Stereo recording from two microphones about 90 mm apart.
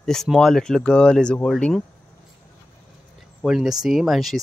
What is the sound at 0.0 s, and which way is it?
Speech, 5° left (ahead or behind).